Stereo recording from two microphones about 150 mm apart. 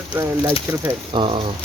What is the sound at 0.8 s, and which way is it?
Speech, 35° right (ahead or behind).